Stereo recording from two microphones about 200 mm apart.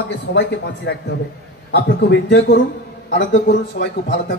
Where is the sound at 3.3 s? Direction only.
45° left (ahead or behind).